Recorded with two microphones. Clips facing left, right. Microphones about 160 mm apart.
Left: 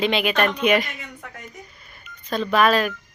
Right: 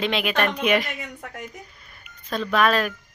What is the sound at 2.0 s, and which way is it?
Speech, centre (ahead or behind).